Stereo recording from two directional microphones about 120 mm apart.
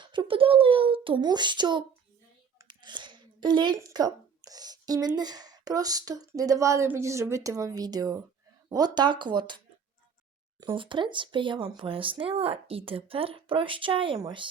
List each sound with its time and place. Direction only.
0.0 s a child's voice: 45° right (ahead or behind)
10.6 s speech: 40° right (ahead or behind)